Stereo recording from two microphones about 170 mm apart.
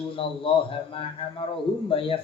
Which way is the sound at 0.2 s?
30° left (ahead or behind).